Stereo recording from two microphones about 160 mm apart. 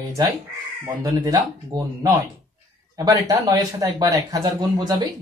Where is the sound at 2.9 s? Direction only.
25° right (ahead or behind).